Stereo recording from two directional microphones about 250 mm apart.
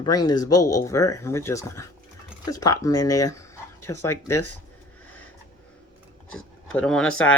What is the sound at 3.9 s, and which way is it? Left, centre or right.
Speech, left.